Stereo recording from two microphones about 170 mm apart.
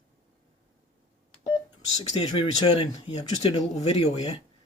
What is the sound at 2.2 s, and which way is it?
Speech, 35° left (ahead or behind).